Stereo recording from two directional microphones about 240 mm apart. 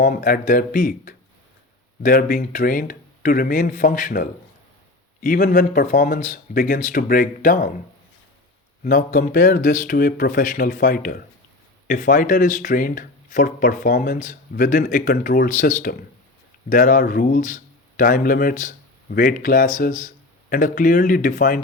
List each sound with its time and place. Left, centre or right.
0.0 s speech: left
8.8 s speech: left